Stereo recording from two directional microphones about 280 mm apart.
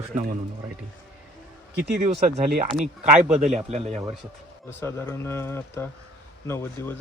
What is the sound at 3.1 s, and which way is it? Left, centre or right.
Speech, centre.